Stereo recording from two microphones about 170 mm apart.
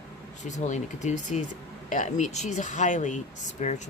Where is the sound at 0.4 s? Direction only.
45° left (ahead or behind).